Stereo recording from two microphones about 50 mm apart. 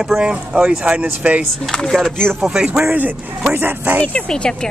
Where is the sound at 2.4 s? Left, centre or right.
Centre.